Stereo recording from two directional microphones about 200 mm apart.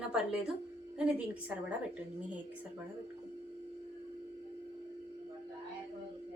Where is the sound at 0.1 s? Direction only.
5° right (ahead or behind).